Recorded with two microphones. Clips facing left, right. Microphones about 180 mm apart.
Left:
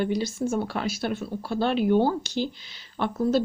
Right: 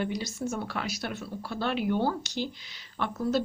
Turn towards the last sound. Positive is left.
turn(degrees=30)  # may be behind; listen again after turning